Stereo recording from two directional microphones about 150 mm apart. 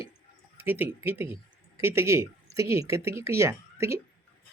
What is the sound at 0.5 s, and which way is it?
Speech, 15° right (ahead or behind).